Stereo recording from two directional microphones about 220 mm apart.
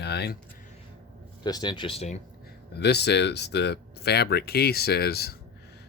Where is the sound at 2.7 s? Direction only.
50° left (ahead or behind).